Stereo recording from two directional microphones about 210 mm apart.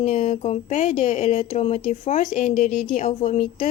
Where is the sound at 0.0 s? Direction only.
35° left (ahead or behind).